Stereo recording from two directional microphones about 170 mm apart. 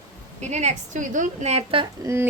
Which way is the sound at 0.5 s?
40° right (ahead or behind).